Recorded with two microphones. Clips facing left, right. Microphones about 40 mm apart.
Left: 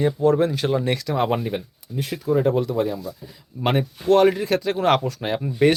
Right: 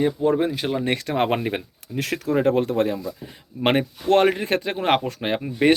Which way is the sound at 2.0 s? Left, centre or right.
Right.